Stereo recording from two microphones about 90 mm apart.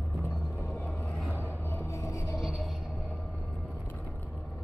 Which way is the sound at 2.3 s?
Centre (ahead or behind).